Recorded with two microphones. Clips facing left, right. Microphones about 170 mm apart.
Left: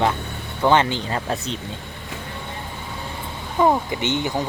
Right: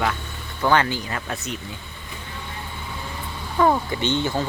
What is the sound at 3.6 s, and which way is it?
Speech, 20° left (ahead or behind).